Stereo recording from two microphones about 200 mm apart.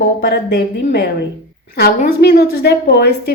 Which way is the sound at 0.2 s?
55° left (ahead or behind).